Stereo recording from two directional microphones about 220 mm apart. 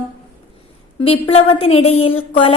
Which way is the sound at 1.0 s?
25° left (ahead or behind).